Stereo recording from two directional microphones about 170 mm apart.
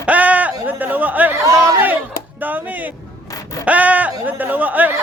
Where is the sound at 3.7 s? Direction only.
10° right (ahead or behind).